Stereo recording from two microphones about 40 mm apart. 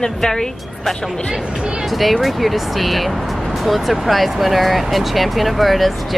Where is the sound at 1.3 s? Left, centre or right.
Centre.